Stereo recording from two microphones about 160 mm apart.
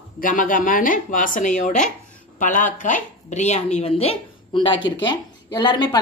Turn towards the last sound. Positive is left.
turn(degrees=25)  # may be behind; listen again after turning